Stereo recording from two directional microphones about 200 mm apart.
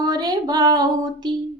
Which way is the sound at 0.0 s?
20° right (ahead or behind).